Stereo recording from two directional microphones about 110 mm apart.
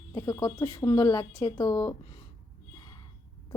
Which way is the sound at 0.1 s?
40° left (ahead or behind).